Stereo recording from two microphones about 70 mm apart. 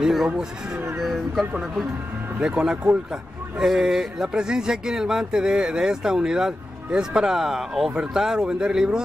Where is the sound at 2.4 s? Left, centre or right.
Centre.